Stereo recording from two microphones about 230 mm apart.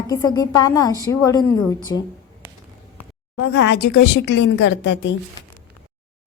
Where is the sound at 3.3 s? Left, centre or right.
Left.